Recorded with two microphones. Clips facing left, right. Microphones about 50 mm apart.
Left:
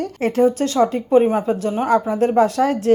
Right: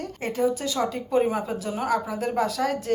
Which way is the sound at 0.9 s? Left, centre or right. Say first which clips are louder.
Left 8 dB; left.